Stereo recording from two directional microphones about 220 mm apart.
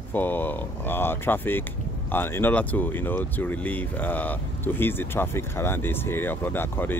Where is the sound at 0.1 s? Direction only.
10° left (ahead or behind).